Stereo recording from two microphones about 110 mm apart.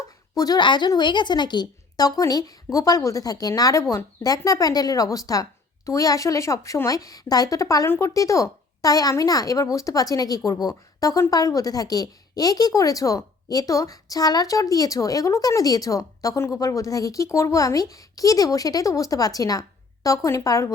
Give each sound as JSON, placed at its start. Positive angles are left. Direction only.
{"t": 0.3, "sound": "speech", "side_deg": 35}